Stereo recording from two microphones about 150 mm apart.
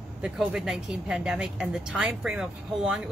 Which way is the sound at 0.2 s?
5° right (ahead or behind).